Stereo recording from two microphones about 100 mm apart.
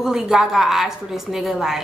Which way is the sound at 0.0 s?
5° right (ahead or behind).